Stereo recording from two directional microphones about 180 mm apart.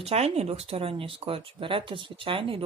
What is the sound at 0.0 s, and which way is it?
Speech, 35° right (ahead or behind).